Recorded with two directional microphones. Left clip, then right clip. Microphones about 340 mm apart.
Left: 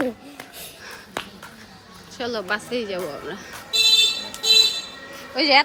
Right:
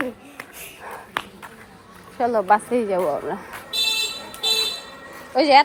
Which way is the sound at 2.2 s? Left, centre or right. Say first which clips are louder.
Right 8 dB; centre.